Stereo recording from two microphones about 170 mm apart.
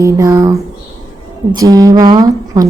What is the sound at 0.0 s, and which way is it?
Speech, 20° right (ahead or behind).